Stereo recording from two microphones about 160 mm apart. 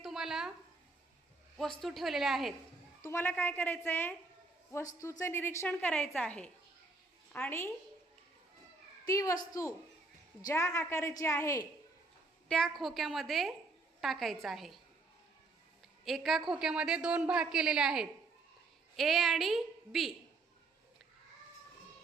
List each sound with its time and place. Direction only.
0.0 s a sound: 5° right (ahead or behind)
1.8 s a woman's voice: centre (ahead or behind)
3.0 s a woman's voice: 15° left (ahead or behind)
9.0 s a woman's voice: 20° left (ahead or behind)
12.5 s a woman's voice: 5° left (ahead or behind)
16.0 s a woman's voice: centre (ahead or behind)